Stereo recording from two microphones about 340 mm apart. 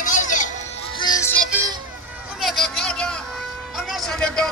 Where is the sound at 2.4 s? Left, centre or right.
Centre.